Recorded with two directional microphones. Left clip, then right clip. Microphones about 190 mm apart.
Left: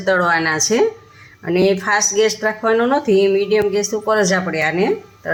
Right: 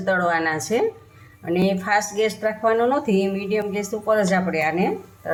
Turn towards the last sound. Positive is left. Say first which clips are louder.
# left 5 dB
turn(degrees=45)  # may be behind; listen again after turning